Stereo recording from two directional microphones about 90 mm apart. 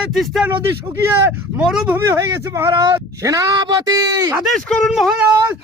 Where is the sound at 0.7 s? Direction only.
25° right (ahead or behind).